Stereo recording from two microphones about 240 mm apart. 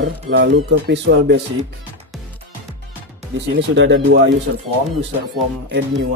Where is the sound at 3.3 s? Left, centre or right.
Right.